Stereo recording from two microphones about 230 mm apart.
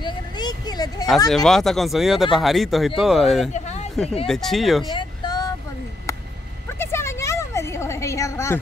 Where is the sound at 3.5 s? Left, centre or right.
Left.